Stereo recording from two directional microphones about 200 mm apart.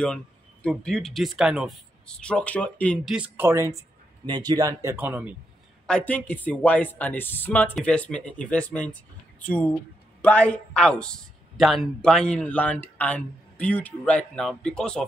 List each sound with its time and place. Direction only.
0.7 s a man's voice: 5° left (ahead or behind)
3.2 s speech: 10° right (ahead or behind)
5.9 s a man's voice: 5° left (ahead or behind)